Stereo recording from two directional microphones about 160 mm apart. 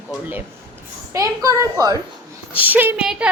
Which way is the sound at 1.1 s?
20° right (ahead or behind).